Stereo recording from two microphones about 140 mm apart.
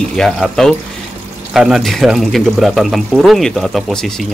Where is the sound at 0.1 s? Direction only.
5° left (ahead or behind).